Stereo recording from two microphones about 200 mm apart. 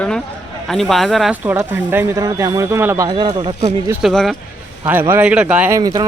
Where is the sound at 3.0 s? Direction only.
25° right (ahead or behind).